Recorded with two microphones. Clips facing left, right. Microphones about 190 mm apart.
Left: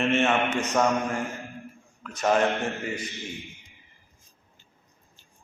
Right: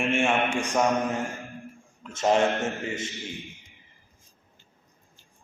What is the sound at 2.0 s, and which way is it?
Mantra, 25° right (ahead or behind).